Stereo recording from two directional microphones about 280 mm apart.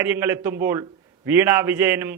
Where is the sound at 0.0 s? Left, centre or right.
Centre.